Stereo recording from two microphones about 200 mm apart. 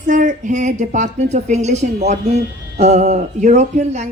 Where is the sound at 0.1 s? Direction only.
40° right (ahead or behind).